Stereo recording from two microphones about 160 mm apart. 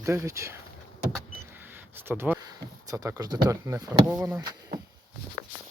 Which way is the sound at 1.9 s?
15° right (ahead or behind).